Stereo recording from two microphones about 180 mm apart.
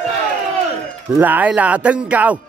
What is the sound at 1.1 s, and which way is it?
Speech, 10° right (ahead or behind).